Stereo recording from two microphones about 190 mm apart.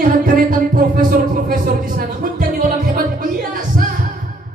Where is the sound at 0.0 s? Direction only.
50° right (ahead or behind).